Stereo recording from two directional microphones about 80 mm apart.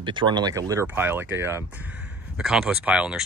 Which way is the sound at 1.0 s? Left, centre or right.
Right.